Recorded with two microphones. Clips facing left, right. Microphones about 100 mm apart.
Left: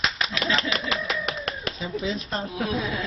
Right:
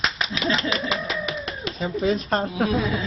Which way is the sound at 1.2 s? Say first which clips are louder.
Right 1 dB; 55° left (ahead or behind).